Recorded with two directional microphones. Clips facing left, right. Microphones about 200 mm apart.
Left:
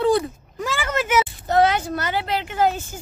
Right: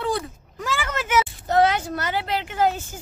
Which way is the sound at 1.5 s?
35° left (ahead or behind).